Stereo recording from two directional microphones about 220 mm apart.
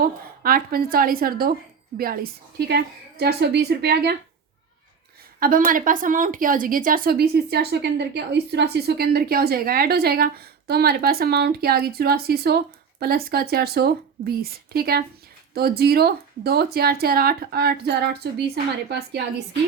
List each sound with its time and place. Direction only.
0.0 s a woman's voice: 40° right (ahead or behind)
5.4 s a woman's voice: 40° right (ahead or behind)